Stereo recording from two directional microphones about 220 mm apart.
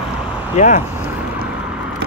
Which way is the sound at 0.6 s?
30° left (ahead or behind).